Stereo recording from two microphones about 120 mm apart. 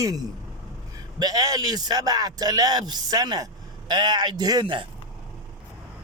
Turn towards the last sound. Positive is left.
turn(degrees=-40)  # may be behind; listen again after turning